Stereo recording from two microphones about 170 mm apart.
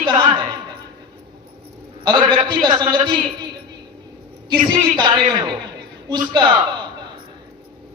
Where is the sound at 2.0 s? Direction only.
25° right (ahead or behind).